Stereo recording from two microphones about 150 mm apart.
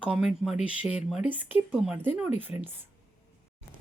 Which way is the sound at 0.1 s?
5° right (ahead or behind).